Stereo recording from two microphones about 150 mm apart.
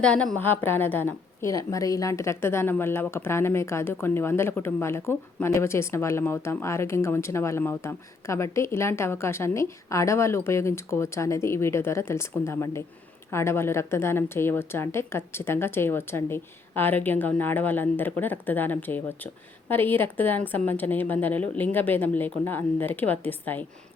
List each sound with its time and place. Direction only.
0.0 s a woman's voice: 5° left (ahead or behind)